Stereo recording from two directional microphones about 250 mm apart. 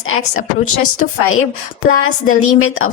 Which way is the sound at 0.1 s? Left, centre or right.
Left.